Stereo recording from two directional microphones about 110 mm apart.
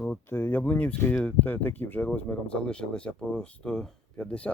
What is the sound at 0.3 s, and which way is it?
Speech, 20° left (ahead or behind).